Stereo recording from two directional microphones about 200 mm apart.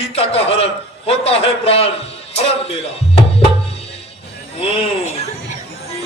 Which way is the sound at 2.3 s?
30° left (ahead or behind).